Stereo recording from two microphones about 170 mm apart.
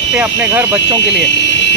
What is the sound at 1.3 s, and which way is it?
Fire alarm, 90° left.